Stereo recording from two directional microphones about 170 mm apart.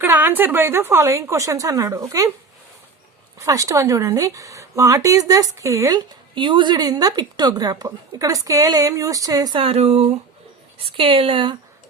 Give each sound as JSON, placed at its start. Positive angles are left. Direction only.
{"t": 0.0, "sound": "a woman's voice", "side_deg": -10}
{"t": 3.4, "sound": "a woman's voice", "side_deg": -20}